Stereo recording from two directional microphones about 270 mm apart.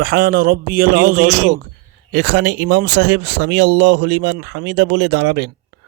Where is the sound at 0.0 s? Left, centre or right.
Right.